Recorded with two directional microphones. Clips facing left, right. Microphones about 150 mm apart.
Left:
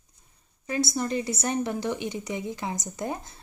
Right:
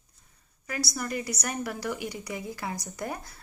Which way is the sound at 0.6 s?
25° left (ahead or behind).